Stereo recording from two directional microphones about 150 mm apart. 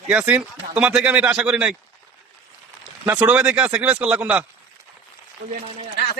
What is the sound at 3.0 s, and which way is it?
Speech, 10° right (ahead or behind).